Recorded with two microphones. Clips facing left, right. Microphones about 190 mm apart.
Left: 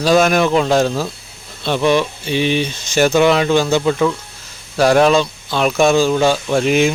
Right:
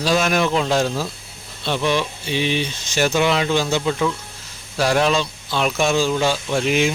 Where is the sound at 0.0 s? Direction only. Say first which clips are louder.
Left 6 dB; 50° left (ahead or behind).